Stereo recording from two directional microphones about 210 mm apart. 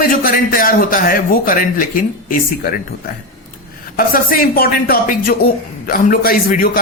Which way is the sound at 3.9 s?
45° left (ahead or behind).